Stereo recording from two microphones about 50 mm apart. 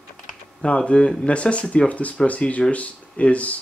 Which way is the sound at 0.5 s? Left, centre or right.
Left.